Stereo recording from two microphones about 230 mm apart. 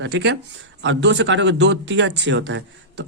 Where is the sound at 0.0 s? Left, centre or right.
Right.